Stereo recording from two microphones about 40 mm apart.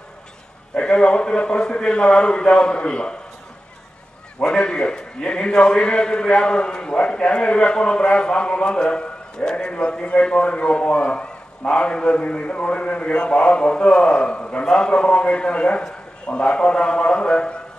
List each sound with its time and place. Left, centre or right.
0.7 s a man's voice: left
4.4 s a man's voice: left